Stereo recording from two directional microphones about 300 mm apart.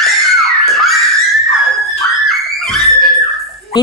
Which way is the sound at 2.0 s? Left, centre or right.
Centre.